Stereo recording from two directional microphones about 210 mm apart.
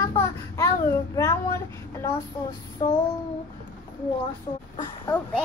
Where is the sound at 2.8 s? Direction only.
20° left (ahead or behind).